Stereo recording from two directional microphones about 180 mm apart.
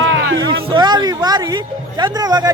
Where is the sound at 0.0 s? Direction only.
80° right.